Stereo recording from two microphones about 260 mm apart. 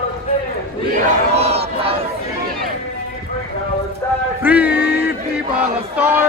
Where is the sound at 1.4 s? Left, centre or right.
Right.